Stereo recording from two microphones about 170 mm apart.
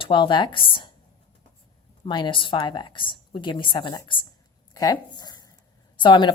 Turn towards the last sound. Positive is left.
turn(degrees=30)  # may be behind; listen again after turning